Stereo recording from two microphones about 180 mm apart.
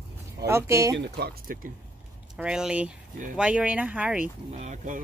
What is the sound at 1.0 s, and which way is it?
Speech, 60° right (ahead or behind).